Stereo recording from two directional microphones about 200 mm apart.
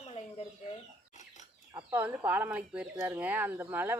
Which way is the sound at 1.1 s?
35° left (ahead or behind).